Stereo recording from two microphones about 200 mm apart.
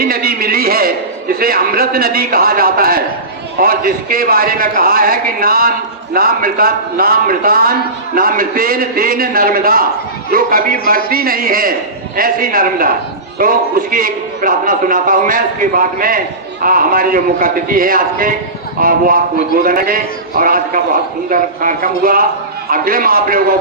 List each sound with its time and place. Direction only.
0.0 s a man's voice: 50° right (ahead or behind)